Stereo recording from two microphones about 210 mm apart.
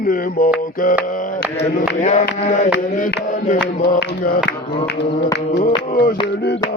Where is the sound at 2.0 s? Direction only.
35° left (ahead or behind).